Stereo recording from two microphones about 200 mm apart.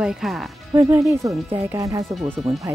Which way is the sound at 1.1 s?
15° right (ahead or behind).